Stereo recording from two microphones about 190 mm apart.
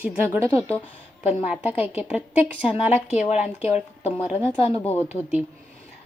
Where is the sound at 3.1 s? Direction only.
35° left (ahead or behind).